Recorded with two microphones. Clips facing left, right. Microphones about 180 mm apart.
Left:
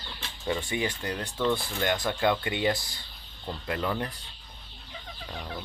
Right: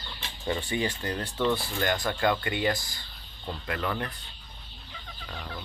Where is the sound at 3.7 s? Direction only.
15° left (ahead or behind).